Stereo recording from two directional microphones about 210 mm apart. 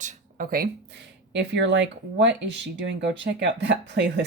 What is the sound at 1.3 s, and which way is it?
Speech, 55° right (ahead or behind).